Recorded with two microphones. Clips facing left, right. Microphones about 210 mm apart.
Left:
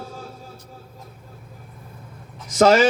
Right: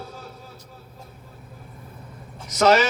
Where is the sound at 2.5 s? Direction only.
45° left (ahead or behind).